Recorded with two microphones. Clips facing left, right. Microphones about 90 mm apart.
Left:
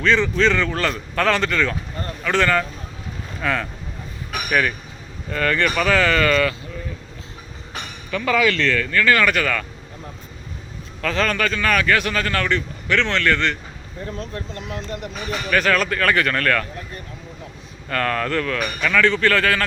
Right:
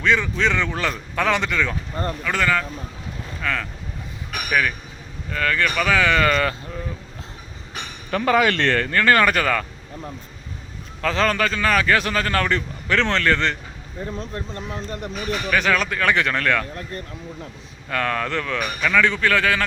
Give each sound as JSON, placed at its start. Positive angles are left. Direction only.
{"t": 0.0, "sound": "a man's voice", "side_deg": -15}
{"t": 5.9, "sound": "a man's voice", "side_deg": -10}
{"t": 8.1, "sound": "speech", "side_deg": -40}
{"t": 8.9, "sound": "speech", "side_deg": -35}
{"t": 11.0, "sound": "a man's voice", "side_deg": -30}
{"t": 17.8, "sound": "a man's voice", "side_deg": -10}
{"t": 18.6, "sound": "a man's voice", "side_deg": -5}